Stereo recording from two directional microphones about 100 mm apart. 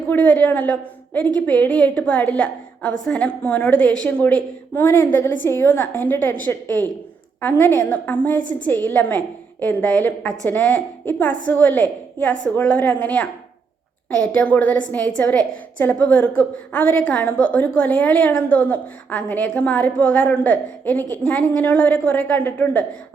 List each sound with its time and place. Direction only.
0.1 s a woman's voice: 15° left (ahead or behind)